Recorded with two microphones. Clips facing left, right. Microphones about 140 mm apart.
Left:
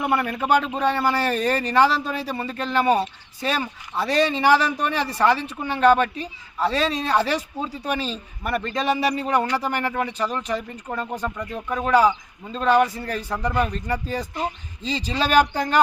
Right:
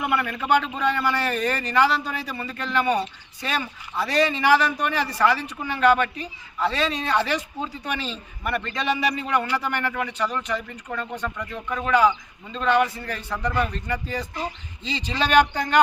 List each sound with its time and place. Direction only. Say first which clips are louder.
0.0 s a man's voice: left 3 dB; 35° left (ahead or behind)